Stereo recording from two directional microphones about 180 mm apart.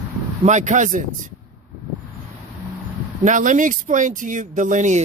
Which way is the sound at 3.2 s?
45° right (ahead or behind).